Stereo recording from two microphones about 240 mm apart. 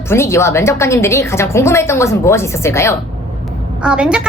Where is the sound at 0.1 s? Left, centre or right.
Centre.